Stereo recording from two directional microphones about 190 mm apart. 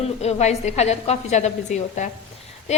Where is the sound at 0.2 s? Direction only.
35° left (ahead or behind).